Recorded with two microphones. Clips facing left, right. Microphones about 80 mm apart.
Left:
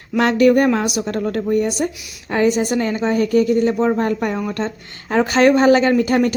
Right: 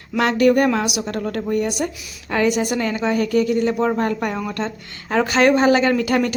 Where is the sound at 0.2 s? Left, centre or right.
Left.